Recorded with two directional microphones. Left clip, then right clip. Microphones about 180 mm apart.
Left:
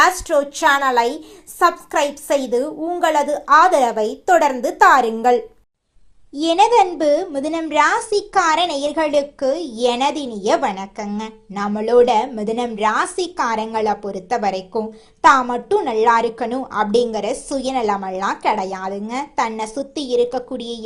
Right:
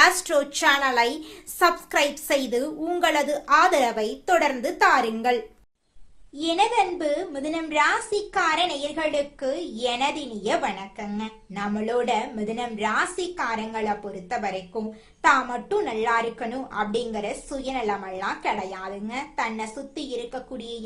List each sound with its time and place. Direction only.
0.0 s a woman's voice: 5° left (ahead or behind); by 5.4 s 20° left (ahead or behind)
6.4 s a woman's voice: 35° left (ahead or behind)